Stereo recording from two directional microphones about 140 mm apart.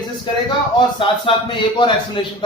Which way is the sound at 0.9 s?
35° left (ahead or behind).